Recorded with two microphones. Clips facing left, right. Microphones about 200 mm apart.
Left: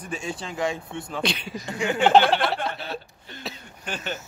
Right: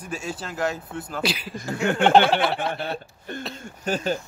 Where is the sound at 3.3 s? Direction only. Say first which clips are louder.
Right 10 dB; 50° right (ahead or behind).